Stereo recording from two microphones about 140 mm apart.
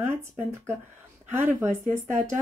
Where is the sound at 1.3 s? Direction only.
15° right (ahead or behind).